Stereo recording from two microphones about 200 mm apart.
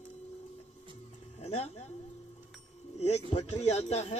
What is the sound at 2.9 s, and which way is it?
A man's voice, 35° left (ahead or behind).